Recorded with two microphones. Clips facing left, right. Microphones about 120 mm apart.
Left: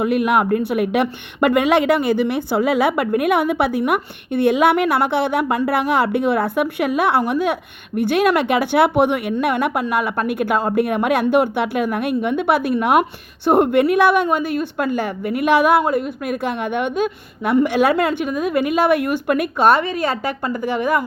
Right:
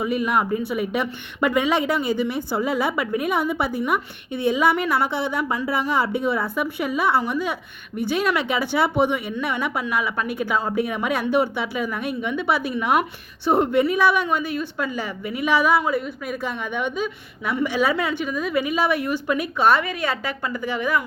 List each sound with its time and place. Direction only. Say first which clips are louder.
0.0 s a woman's voice: left 5 dB; 65° left (ahead or behind); by 19.8 s 50° left (ahead or behind)
19.8 s a woman's voice: left 5 dB; 35° left (ahead or behind)